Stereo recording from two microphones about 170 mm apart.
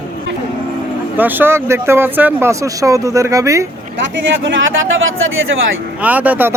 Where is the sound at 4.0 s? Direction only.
90° right.